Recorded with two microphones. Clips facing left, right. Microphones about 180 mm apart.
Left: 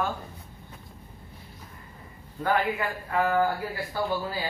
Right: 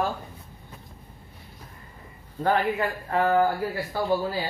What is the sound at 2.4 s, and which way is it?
A man's voice, 35° right (ahead or behind).